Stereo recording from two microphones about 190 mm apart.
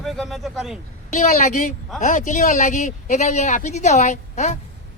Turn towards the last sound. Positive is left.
turn(degrees=35)  # may be behind; listen again after turning